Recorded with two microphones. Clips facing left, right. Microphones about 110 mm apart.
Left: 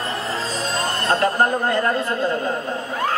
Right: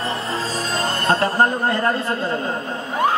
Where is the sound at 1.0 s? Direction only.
30° right (ahead or behind).